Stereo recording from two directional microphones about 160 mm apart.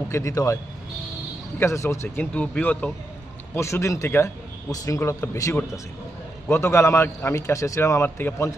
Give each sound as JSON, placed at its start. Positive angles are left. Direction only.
{"t": 0.1, "sound": "speech", "side_deg": 20}
{"t": 1.6, "sound": "speech", "side_deg": 20}